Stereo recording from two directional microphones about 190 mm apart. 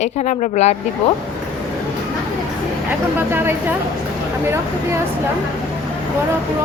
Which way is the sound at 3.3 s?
10° right (ahead or behind).